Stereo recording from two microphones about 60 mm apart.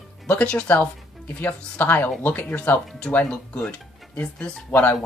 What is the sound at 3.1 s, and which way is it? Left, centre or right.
Speech, centre.